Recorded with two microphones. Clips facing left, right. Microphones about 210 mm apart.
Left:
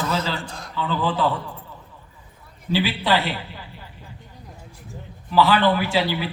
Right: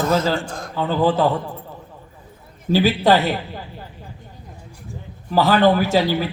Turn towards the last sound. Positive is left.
turn(degrees=-45)  # may be behind; listen again after turning